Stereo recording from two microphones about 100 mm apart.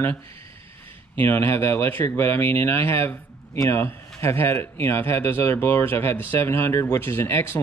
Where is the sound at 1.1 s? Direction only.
25° left (ahead or behind).